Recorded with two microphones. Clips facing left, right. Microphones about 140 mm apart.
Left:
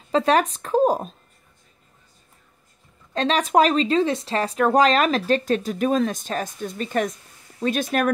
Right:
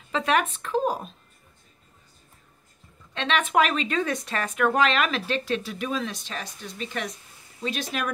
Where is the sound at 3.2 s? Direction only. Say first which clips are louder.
Left 5 dB; 35° left (ahead or behind).